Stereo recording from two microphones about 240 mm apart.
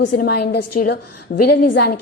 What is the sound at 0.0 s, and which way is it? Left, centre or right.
A woman's voice, left.